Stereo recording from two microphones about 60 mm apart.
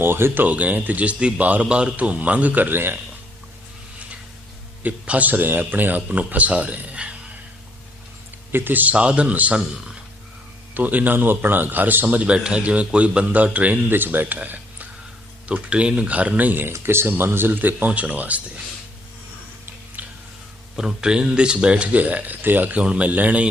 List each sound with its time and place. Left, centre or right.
0.0 s speech: right
0.4 s a man's voice: right
4.8 s a man's voice: right
8.5 s a man's voice: right
10.8 s a man's voice: right
14.3 s a sound: right
15.4 s a man's voice: centre
16.7 s speech: right
20.0 s a sound: right
20.7 s a man's voice: centre